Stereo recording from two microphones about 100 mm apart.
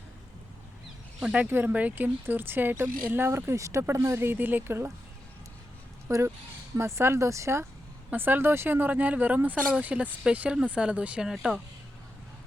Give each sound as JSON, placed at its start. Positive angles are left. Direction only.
{"t": 1.2, "sound": "speech", "side_deg": -10}
{"t": 6.1, "sound": "speech", "side_deg": -30}